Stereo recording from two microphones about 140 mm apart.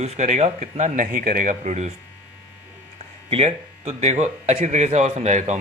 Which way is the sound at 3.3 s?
50° right (ahead or behind).